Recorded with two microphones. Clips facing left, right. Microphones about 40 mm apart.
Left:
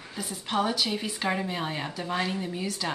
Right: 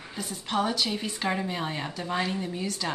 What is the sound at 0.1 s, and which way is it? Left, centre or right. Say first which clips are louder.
Speech: even; centre.